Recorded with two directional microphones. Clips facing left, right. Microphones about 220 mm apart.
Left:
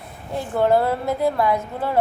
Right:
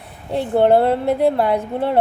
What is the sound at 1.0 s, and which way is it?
Speech, 60° right (ahead or behind).